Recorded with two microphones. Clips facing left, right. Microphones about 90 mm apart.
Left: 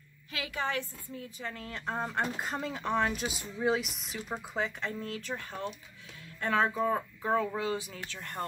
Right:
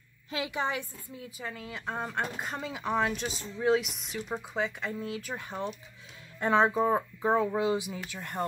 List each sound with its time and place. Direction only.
0.3 s a woman's voice: 20° right (ahead or behind)